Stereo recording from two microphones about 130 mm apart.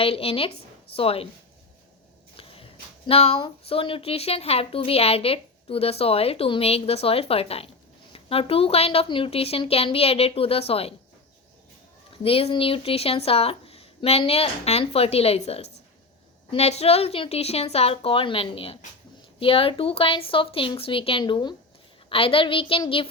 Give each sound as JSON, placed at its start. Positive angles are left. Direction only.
{"t": 0.0, "sound": "a woman's voice", "side_deg": 45}
{"t": 2.3, "sound": "a sound", "side_deg": 45}
{"t": 3.1, "sound": "a woman's voice", "side_deg": 50}
{"t": 12.1, "sound": "a woman's voice", "side_deg": 45}